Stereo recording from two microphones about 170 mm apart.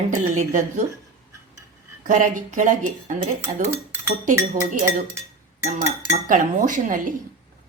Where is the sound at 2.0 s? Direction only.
50° right (ahead or behind).